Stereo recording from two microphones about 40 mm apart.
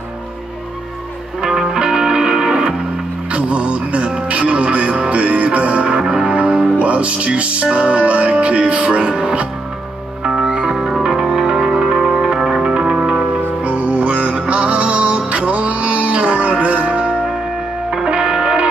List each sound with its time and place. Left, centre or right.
1.4 s music: centre
3.3 s music: right
10.2 s music: centre
13.6 s music: right
18.2 s music: centre